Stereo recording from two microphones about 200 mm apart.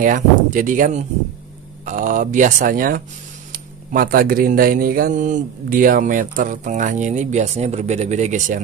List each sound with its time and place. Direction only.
0.0 s speech: 40° right (ahead or behind)